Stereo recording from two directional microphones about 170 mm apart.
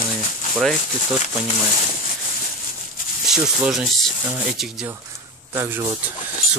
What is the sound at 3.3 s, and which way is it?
Speech, centre (ahead or behind).